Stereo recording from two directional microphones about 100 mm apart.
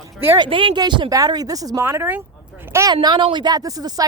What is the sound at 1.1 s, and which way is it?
Speech, 40° right (ahead or behind).